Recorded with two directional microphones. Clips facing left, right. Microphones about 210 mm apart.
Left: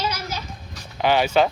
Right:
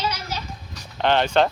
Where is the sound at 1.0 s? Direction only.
5° left (ahead or behind).